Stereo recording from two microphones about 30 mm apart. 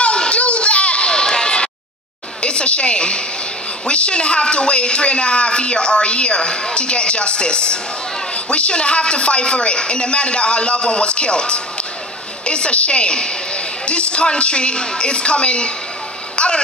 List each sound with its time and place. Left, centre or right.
0.3 s a sound: left
1.1 s run: left
2.4 s a woman's voice: left